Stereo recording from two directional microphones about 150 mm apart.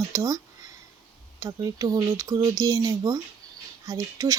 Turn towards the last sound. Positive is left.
turn(degrees=-20)  # may be behind; listen again after turning